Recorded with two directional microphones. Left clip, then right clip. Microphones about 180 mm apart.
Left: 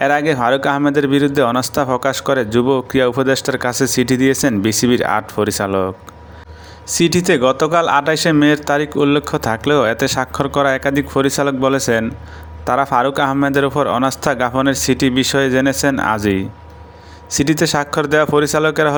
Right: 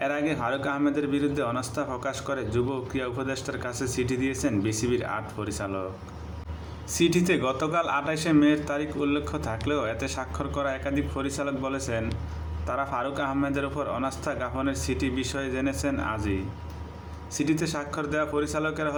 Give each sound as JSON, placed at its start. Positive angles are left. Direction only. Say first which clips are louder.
{"t": 0.0, "sound": "a man's voice", "louder": "left 13 dB", "side_deg": 55}